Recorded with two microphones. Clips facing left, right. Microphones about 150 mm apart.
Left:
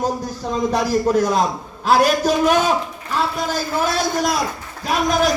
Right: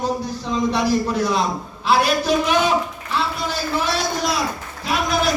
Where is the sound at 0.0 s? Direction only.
45° left (ahead or behind).